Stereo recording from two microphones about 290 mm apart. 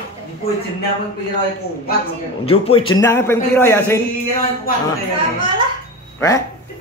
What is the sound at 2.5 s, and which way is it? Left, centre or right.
Speech, centre.